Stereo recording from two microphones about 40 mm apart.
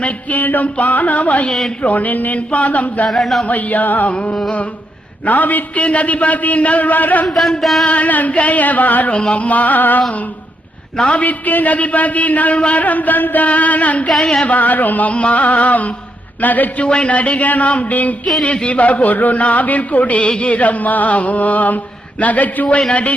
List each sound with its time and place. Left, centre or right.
0.0 s speech: left
1.5 s speech: centre
1.8 s speech: left
3.1 s music: centre
3.4 s music: left
4.1 s speech: left
5.2 s music: left
5.8 s speech: left
7.3 s music: centre
7.9 s speech: left
10.9 s a man's voice: left
11.2 s speech: left
16.4 s music: left
16.8 s speech: left